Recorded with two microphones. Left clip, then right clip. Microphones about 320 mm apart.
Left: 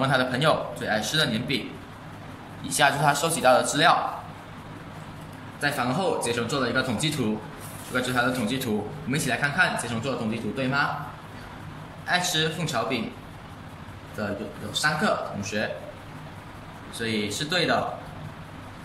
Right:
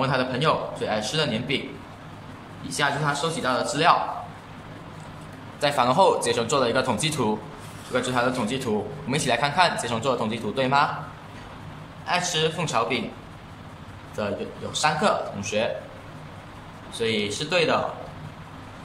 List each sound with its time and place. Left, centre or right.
0.0 s a man's voice: centre
2.7 s a man's voice: centre
5.6 s a man's voice: centre
12.1 s a man's voice: centre
14.1 s a man's voice: centre
16.9 s a man's voice: centre